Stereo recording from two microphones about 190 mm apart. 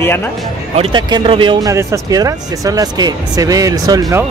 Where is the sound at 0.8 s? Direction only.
25° right (ahead or behind).